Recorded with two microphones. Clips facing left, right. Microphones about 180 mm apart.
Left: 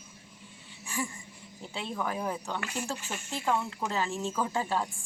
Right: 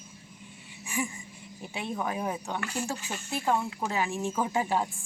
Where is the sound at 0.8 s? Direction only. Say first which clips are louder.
Right 2 dB; 15° right (ahead or behind).